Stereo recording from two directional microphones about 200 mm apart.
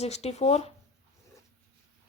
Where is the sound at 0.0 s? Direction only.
30° left (ahead or behind).